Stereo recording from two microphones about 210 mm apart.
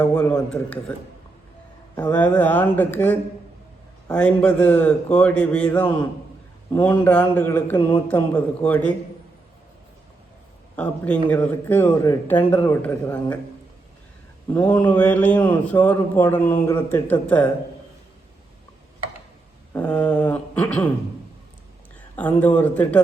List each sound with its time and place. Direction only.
0.0 s a man's voice: 10° left (ahead or behind)
2.0 s a man's voice: 5° left (ahead or behind)
7.8 s speech: 25° left (ahead or behind)
8.1 s a man's voice: 10° left (ahead or behind)
10.8 s a man's voice: 5° left (ahead or behind)
14.5 s a man's voice: 5° left (ahead or behind)
19.7 s a man's voice: 5° left (ahead or behind)
22.4 s a man's voice: 10° left (ahead or behind)